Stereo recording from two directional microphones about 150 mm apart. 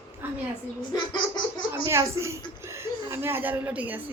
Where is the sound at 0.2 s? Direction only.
15° right (ahead or behind).